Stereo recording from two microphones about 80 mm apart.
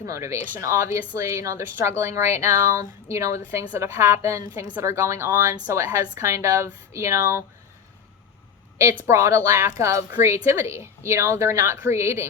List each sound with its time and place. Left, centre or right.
0.0 s a woman's voice: right
9.0 s a woman's voice: right